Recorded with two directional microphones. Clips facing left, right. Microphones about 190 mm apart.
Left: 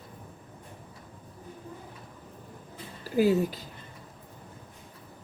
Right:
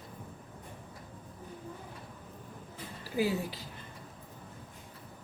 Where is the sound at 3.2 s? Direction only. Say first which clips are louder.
Left 8 dB; 45° left (ahead or behind).